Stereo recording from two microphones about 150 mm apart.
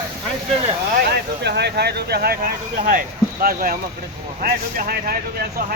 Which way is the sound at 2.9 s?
75° right (ahead or behind).